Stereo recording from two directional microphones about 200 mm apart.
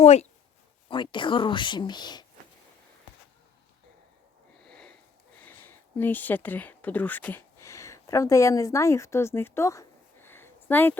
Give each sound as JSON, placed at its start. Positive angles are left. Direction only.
{"t": 0.0, "sound": "speech", "side_deg": 30}
{"t": 4.6, "sound": "sniff", "side_deg": 5}
{"t": 5.5, "sound": "speech", "side_deg": 10}